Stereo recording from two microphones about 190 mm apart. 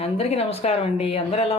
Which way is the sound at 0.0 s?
30° left (ahead or behind).